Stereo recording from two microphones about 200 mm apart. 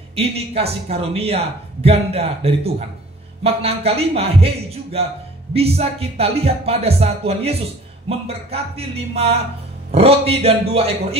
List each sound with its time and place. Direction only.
0.1 s a man's voice: 30° right (ahead or behind)